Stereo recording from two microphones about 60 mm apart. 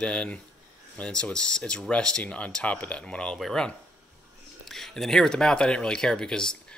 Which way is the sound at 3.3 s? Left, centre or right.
Centre.